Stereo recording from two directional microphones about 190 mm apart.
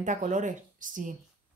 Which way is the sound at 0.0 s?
40° right (ahead or behind).